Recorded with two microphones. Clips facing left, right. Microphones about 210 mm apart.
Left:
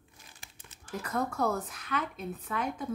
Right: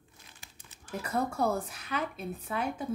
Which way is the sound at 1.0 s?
10° right (ahead or behind).